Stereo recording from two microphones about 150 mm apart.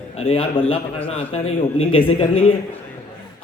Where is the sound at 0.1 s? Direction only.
40° left (ahead or behind).